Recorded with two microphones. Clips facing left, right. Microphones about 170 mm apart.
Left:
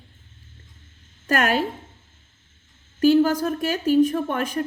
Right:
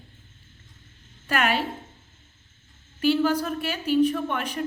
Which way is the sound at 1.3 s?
45° left (ahead or behind).